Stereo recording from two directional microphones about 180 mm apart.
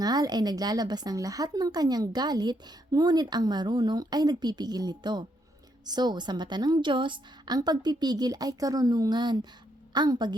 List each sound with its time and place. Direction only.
0.0 s a woman's voice: 20° right (ahead or behind)